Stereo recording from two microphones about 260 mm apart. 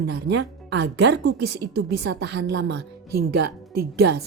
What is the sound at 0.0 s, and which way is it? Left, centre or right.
A woman's voice, right.